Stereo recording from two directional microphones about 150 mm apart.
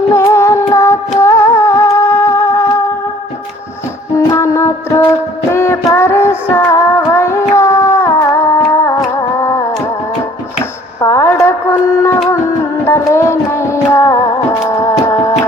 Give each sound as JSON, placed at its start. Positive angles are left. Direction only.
{"t": 0.1, "sound": "music", "side_deg": 20}
{"t": 4.2, "sound": "music", "side_deg": 20}
{"t": 10.6, "sound": "a sound", "side_deg": 20}
{"t": 12.8, "sound": "music", "side_deg": 15}